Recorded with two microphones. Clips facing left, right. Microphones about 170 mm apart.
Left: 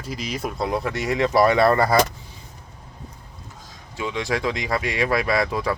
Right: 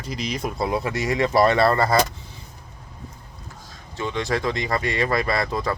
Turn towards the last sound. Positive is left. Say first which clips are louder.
# left 2 dB
turn(degrees=10)  # may be behind; listen again after turning